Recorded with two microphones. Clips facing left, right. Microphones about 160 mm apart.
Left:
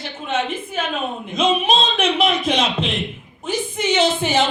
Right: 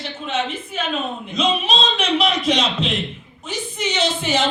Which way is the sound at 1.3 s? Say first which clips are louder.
Left 3 dB; 50° left (ahead or behind).